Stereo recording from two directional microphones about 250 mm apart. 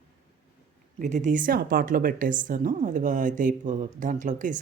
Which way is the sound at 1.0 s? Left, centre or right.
Right.